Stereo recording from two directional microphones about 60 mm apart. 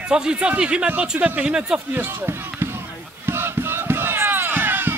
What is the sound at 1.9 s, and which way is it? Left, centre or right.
Speech, right.